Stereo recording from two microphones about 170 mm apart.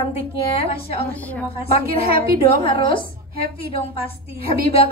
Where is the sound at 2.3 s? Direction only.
35° left (ahead or behind).